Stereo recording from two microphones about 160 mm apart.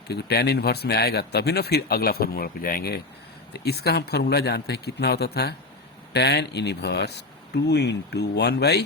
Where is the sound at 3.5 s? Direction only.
90° left.